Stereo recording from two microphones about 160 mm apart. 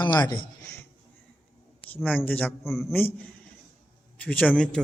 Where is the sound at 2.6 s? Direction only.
Centre (ahead or behind).